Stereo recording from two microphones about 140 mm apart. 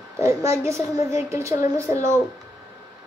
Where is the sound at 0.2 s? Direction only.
20° right (ahead or behind).